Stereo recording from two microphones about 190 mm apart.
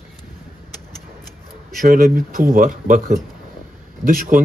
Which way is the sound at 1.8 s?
45° right (ahead or behind).